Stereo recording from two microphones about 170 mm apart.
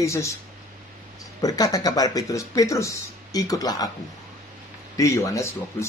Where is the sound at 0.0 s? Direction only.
15° left (ahead or behind).